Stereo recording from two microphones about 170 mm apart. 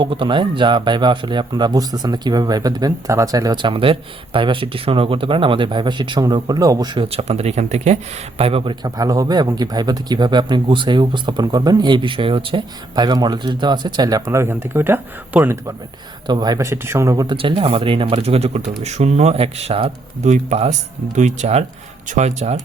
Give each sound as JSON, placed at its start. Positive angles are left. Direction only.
{"t": 0.0, "sound": "speech", "side_deg": -30}
{"t": 16.2, "sound": "speech", "side_deg": -25}
{"t": 17.3, "sound": "speech", "side_deg": -30}